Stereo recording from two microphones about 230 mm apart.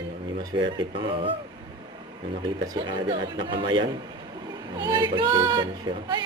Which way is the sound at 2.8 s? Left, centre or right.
Right.